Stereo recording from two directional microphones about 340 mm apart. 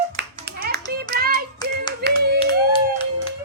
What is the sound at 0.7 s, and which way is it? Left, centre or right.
Hands, right.